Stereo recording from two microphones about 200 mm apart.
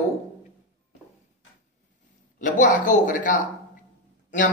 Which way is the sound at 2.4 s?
40° left (ahead or behind).